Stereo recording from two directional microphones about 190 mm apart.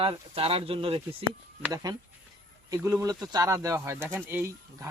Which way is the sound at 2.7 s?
15° right (ahead or behind).